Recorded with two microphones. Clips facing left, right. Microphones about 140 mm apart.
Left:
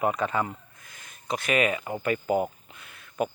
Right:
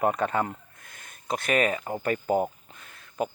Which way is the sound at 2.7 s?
40° right (ahead or behind).